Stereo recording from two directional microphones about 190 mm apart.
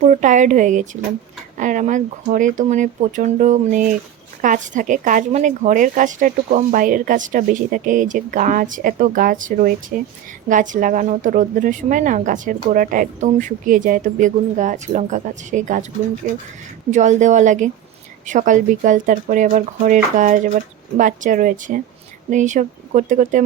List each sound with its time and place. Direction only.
0.0 s a woman's voice: 40° right (ahead or behind)
16.9 s a woman's voice: 40° right (ahead or behind)